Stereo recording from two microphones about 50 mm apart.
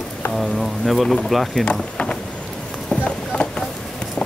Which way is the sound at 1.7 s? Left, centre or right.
Centre.